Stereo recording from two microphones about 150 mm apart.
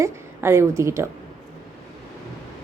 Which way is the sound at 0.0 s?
15° right (ahead or behind).